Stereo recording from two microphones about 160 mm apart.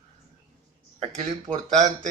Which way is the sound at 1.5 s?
50° right (ahead or behind).